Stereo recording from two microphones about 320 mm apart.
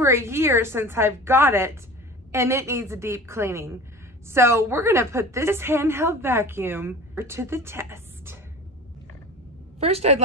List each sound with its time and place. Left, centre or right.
0.0 s a woman's voice: centre
9.8 s a woman's voice: centre